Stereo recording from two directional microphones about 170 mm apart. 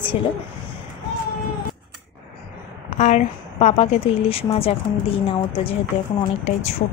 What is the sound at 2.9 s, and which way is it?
A woman's voice, 45° left (ahead or behind).